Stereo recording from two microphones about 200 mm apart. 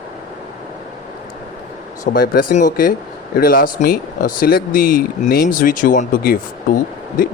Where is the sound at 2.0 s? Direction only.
50° left (ahead or behind).